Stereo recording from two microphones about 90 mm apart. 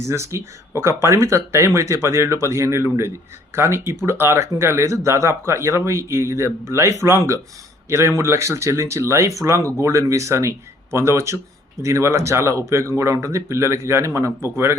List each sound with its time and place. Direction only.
0.0 s speech: 30° right (ahead or behind)